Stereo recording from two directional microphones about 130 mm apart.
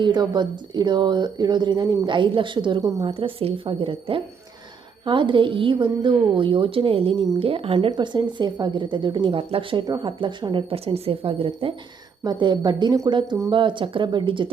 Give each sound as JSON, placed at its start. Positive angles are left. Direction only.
{"t": 0.0, "sound": "a woman's voice", "side_deg": -35}
{"t": 3.2, "sound": "a woman's voice", "side_deg": -45}
{"t": 12.2, "sound": "a woman's voice", "side_deg": -35}